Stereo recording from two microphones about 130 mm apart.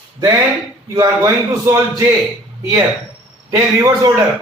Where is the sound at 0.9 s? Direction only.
25° right (ahead or behind).